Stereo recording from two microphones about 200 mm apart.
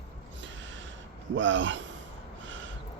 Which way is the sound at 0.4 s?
65° right (ahead or behind).